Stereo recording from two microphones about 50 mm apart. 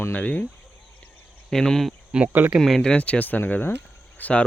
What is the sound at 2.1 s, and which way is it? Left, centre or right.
Speech, right.